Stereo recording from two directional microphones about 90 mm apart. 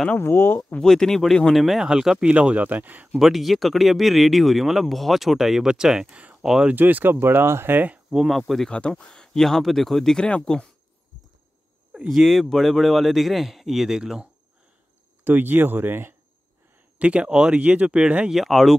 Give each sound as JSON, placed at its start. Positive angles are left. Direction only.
{"t": 0.2, "sound": "speech", "side_deg": 25}
{"t": 0.6, "sound": "speech", "side_deg": 10}
{"t": 3.1, "sound": "speech", "side_deg": 0}
{"t": 6.4, "sound": "speech", "side_deg": -5}
{"t": 6.7, "sound": "speech", "side_deg": -20}
{"t": 8.1, "sound": "speech", "side_deg": 0}
{"t": 11.9, "sound": "speech", "side_deg": -5}
{"t": 15.2, "sound": "speech", "side_deg": -20}
{"t": 17.0, "sound": "speech", "side_deg": -10}